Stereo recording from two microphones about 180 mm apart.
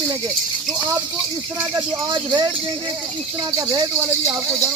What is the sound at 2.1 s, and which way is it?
Speech, 25° right (ahead or behind).